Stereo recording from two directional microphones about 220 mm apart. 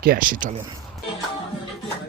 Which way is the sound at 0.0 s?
40° right (ahead or behind).